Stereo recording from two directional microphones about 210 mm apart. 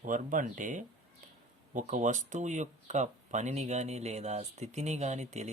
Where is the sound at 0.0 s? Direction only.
40° right (ahead or behind).